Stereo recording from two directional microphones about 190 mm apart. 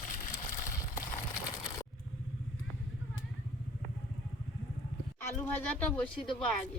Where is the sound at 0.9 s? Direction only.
45° left (ahead or behind).